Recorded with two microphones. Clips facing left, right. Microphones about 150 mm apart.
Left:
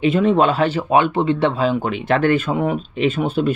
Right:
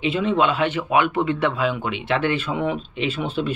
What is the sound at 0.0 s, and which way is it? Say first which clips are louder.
Speech: left 5 dB; 45° left (ahead or behind).